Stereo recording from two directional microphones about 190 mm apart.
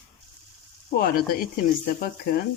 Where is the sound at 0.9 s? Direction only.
50° left (ahead or behind).